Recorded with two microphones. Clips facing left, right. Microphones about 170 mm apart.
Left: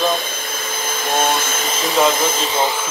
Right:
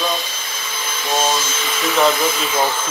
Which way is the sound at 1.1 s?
55° left (ahead or behind).